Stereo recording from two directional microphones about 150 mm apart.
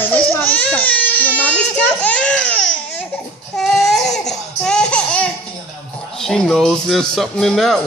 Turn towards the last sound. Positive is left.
turn(degrees=0)  # may be behind; listen again after turning